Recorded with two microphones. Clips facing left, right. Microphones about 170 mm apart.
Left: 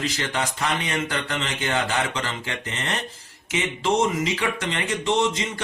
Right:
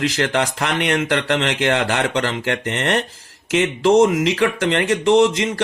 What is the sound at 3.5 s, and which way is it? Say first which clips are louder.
Speech: right 8 dB; 90° right.